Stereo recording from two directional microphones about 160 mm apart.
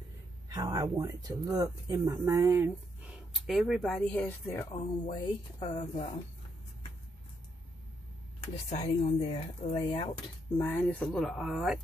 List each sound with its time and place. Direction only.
0.5 s speech: 20° right (ahead or behind)
3.3 s speech: centre (ahead or behind)
4.5 s speech: 20° left (ahead or behind)
5.1 s speech: 35° left (ahead or behind)
8.6 s speech: 40° left (ahead or behind)
10.6 s speech: 10° left (ahead or behind); by 11.8 s 5° right (ahead or behind)